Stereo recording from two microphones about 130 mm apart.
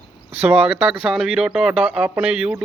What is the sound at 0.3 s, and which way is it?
Speech, 15° right (ahead or behind).